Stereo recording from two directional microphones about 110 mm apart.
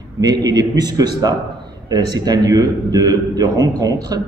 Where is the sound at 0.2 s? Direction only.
35° right (ahead or behind).